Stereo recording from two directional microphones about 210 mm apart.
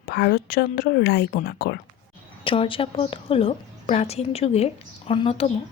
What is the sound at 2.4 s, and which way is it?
A woman's voice, 25° left (ahead or behind).